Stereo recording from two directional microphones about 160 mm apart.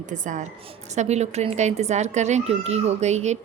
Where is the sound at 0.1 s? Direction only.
50° right (ahead or behind).